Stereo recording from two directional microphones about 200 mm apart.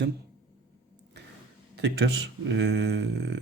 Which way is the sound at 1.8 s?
60° right (ahead or behind).